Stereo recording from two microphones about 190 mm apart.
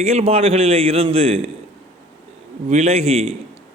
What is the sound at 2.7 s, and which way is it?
Speech, 35° right (ahead or behind).